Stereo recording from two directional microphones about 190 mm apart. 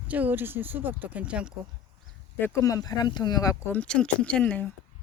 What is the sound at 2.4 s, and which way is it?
Speech, 15° left (ahead or behind).